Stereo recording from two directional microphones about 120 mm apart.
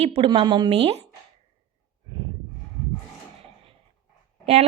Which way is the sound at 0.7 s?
55° right (ahead or behind).